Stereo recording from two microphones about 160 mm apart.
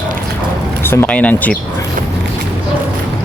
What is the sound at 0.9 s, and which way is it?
Speech, 10° left (ahead or behind).